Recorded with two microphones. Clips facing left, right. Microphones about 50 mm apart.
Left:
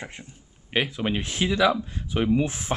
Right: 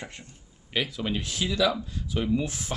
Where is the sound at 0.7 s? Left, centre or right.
Left.